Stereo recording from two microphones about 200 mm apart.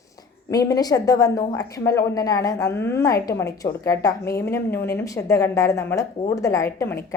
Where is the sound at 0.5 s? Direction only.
20° left (ahead or behind).